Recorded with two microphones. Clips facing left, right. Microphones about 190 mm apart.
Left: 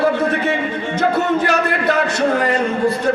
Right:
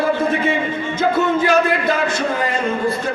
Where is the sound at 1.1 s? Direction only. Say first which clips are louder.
Right 4 dB; 70° left (ahead or behind).